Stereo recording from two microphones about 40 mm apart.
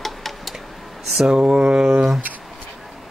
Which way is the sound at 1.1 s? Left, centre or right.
Centre.